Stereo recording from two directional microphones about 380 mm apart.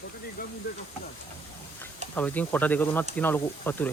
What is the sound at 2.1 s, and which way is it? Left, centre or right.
Speech, centre.